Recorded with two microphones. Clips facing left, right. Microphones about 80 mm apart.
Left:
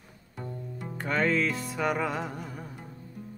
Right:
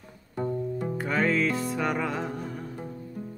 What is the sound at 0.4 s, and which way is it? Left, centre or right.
Music, right.